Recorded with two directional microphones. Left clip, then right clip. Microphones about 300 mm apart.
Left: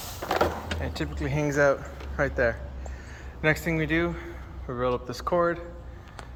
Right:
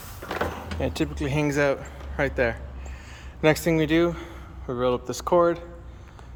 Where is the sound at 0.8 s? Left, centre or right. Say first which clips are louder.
Right 5 dB; centre.